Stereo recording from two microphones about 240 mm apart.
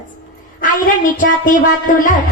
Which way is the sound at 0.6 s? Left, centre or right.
Left.